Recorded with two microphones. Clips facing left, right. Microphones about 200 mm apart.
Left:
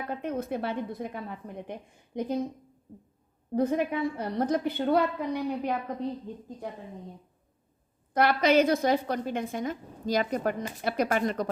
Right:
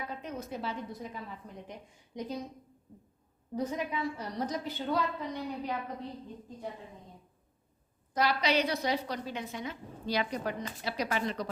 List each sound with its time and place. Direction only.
0.1 s a woman's voice: 55° left (ahead or behind)
3.5 s a woman's voice: 55° left (ahead or behind)
8.1 s a woman's voice: 55° left (ahead or behind)